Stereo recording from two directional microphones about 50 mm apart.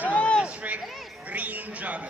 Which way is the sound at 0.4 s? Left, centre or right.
Right.